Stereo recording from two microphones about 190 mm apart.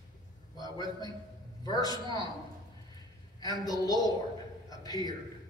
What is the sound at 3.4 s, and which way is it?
A man's voice, 20° left (ahead or behind).